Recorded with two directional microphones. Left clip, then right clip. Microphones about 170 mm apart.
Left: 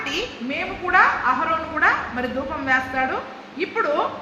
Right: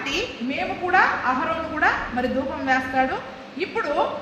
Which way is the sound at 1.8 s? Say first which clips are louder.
Left 1 dB; 35° right (ahead or behind).